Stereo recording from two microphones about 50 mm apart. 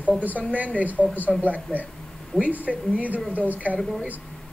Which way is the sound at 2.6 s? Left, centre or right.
Right.